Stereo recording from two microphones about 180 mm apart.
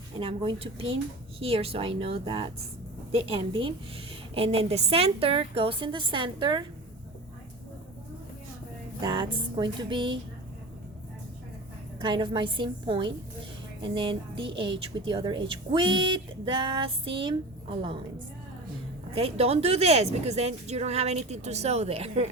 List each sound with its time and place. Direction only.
0.2 s speech: 30° right (ahead or behind)
9.0 s speech: 25° right (ahead or behind)
11.9 s speech: 25° right (ahead or behind)
19.1 s speech: 35° right (ahead or behind)